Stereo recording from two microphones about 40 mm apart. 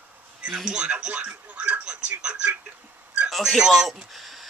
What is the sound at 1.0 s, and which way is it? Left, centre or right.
Telephone, right.